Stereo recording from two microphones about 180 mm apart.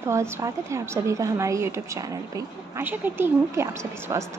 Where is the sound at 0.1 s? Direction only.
15° right (ahead or behind).